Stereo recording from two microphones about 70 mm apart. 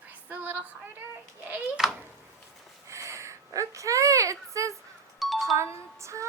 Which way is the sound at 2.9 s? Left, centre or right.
Right.